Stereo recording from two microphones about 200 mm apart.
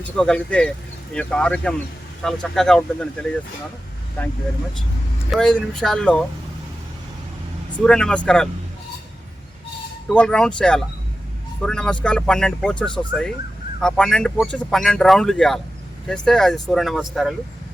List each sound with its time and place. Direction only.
0.2 s speech: 5° left (ahead or behind)
4.2 s speech: 10° left (ahead or behind)
7.9 s speech: 5° left (ahead or behind)
10.1 s speech: 5° left (ahead or behind)